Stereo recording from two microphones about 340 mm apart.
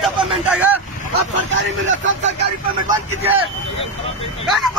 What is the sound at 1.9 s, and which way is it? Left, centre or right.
Speech, right.